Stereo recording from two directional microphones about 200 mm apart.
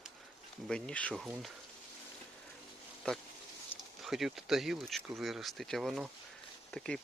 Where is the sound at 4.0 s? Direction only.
Centre (ahead or behind).